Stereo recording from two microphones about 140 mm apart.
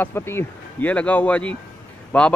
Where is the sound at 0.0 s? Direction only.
15° left (ahead or behind).